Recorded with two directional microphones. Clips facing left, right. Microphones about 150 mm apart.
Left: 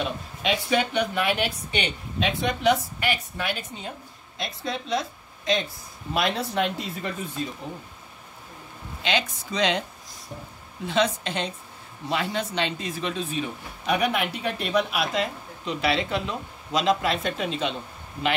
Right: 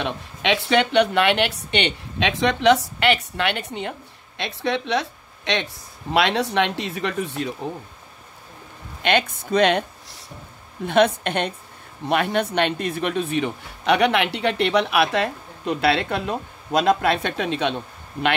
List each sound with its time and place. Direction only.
0.0 s a woman's voice: 80° right
6.1 s speech: 90° right; by 7.5 s 70° right (ahead or behind)
9.0 s speech: 55° right (ahead or behind)
10.9 s speech: 60° right (ahead or behind)